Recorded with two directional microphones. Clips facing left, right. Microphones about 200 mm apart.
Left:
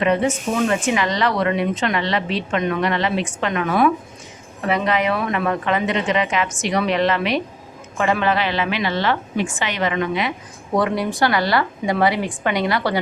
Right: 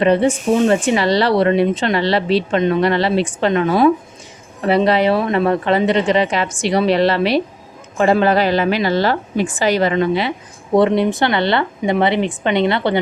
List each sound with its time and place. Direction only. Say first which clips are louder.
0.0 s a woman's voice: right 5 dB; 30° right (ahead or behind)